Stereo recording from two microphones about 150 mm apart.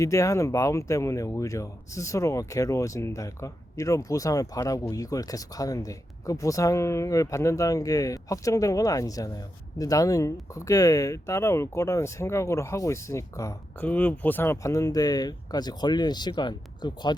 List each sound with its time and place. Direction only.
0.0 s speech: 20° left (ahead or behind)
13.8 s speech: 10° left (ahead or behind); by 17.2 s 30° left (ahead or behind)